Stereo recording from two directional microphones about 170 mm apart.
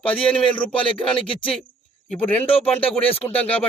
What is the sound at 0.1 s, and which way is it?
Speech, 5° left (ahead or behind).